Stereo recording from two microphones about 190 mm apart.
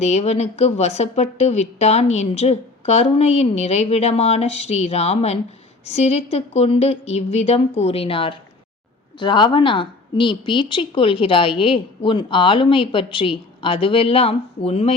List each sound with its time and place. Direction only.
0.0 s a woman's voice: 35° left (ahead or behind)